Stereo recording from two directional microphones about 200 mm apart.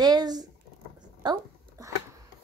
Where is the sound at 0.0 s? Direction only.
20° right (ahead or behind).